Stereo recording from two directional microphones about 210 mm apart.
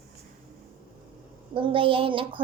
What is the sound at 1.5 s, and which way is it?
Speech, 25° right (ahead or behind).